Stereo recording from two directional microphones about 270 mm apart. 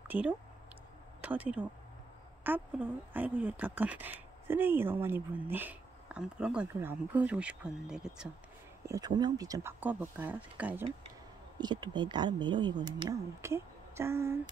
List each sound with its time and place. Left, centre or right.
0.1 s speech: centre
8.8 s speech: centre